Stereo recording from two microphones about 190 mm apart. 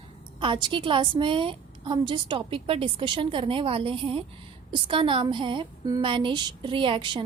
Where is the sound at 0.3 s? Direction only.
25° right (ahead or behind).